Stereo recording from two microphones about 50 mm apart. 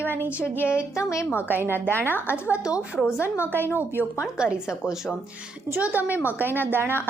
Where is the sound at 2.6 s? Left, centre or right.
Centre.